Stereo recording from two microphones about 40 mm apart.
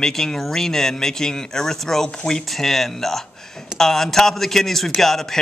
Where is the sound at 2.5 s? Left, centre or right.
Centre.